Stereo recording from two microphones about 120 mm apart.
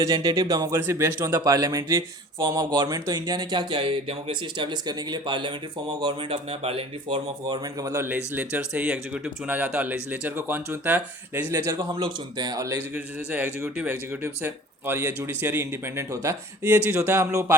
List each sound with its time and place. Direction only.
0.0 s speech: 35° right (ahead or behind)
0.7 s speech: 20° right (ahead or behind); by 7.2 s 50° right (ahead or behind)
7.4 s speech: 30° right (ahead or behind); by 11.5 s 15° right (ahead or behind)
11.5 s speech: 30° right (ahead or behind)
12.9 s speech: 15° right (ahead or behind)